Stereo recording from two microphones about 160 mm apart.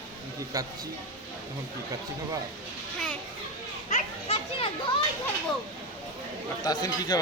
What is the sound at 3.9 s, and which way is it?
Children playing, 40° left (ahead or behind).